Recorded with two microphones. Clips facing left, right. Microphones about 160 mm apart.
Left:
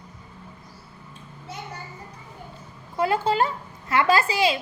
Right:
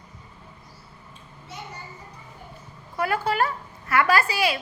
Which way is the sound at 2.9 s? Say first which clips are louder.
Left 3 dB; 25° left (ahead or behind).